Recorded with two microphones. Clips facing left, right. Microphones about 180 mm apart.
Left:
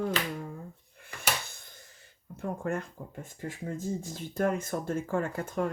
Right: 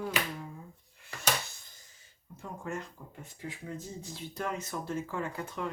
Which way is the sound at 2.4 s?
55° left (ahead or behind).